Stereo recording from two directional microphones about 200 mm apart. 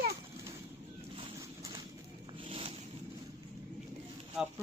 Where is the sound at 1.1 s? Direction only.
20° right (ahead or behind).